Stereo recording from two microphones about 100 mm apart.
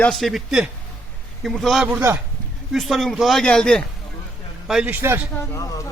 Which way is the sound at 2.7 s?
Centre (ahead or behind).